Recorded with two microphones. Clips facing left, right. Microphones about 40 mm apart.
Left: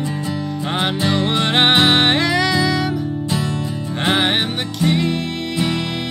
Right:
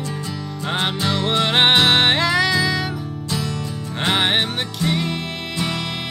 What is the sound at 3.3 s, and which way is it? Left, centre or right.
Music, left.